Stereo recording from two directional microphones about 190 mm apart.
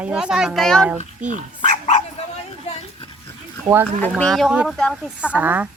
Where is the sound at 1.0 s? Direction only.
40° right (ahead or behind).